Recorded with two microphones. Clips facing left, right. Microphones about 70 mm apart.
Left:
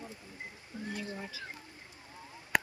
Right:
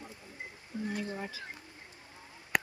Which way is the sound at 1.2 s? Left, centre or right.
Right.